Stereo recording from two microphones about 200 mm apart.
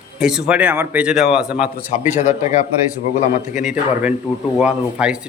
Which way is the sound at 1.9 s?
35° left (ahead or behind).